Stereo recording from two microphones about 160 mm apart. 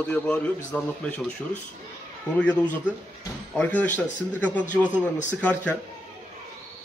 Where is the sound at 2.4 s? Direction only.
5° left (ahead or behind).